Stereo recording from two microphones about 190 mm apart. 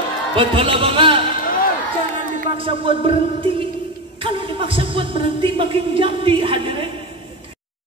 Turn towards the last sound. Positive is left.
turn(degrees=-30)  # may be behind; listen again after turning